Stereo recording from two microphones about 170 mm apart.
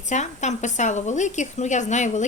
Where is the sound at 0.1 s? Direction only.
45° left (ahead or behind).